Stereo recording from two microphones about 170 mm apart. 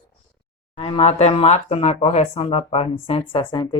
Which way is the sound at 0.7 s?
35° left (ahead or behind).